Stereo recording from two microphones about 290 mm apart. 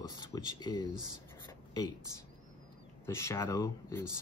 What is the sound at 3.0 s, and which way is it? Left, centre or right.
Speech, centre.